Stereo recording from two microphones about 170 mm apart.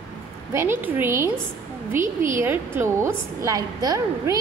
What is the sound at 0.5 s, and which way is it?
Speech, 15° right (ahead or behind).